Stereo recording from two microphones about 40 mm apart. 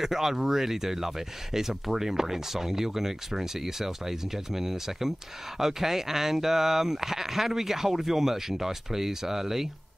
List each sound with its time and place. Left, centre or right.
0.0 s speech: centre